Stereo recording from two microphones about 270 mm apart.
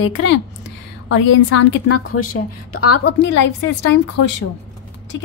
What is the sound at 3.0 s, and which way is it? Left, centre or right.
A woman's voice, left.